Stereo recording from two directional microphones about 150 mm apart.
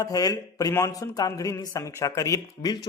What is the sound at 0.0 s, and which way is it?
Speech, 25° left (ahead or behind).